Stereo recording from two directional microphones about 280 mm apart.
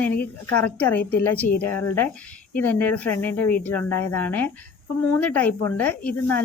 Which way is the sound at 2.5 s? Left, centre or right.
Centre.